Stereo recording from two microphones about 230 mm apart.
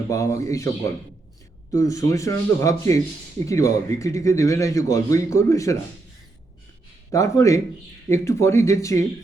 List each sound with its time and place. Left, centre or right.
0.1 s a man's voice: centre
1.7 s speech: centre
7.1 s speech: centre